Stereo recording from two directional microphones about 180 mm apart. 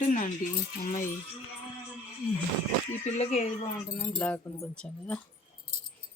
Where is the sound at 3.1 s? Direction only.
40° left (ahead or behind).